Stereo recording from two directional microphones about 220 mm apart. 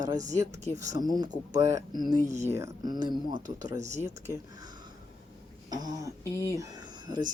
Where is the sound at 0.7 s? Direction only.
10° left (ahead or behind).